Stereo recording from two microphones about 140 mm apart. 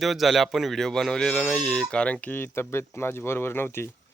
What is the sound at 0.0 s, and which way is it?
Speech, centre (ahead or behind).